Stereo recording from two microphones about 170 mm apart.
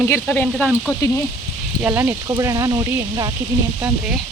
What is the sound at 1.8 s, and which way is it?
Speech, 10° right (ahead or behind).